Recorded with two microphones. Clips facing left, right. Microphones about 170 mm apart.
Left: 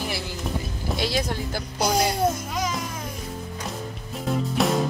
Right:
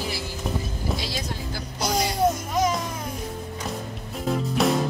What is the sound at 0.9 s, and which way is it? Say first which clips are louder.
Speech: left 6 dB; 65° left (ahead or behind).